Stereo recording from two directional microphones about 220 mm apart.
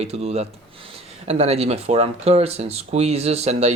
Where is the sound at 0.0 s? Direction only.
30° right (ahead or behind).